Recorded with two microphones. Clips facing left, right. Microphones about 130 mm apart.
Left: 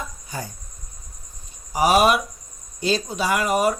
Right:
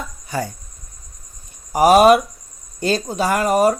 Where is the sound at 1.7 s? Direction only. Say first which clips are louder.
Right 6 dB; 45° right (ahead or behind).